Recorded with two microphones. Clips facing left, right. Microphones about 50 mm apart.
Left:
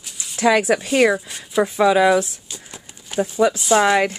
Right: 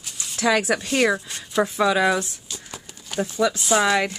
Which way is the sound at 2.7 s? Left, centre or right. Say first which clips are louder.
Left 4 dB; centre.